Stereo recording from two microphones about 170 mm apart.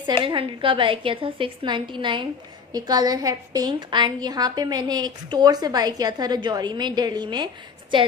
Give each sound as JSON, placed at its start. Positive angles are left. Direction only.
{"t": 0.0, "sound": "a woman's voice", "side_deg": -30}